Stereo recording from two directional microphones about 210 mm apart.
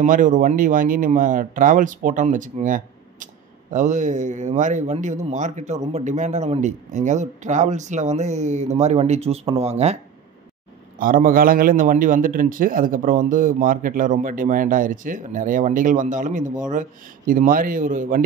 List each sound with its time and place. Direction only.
0.0 s speech: 40° right (ahead or behind)
11.0 s speech: 40° right (ahead or behind)